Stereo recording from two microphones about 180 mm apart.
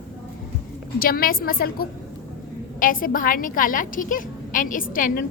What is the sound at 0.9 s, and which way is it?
A woman's voice, 55° left (ahead or behind).